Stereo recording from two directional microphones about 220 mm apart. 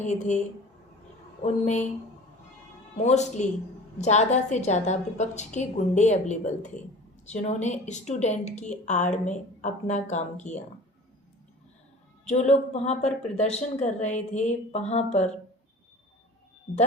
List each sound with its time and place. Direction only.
0.0 s a woman's voice: 35° left (ahead or behind)
3.0 s a woman's voice: 30° left (ahead or behind)
12.3 s a woman's voice: 30° left (ahead or behind)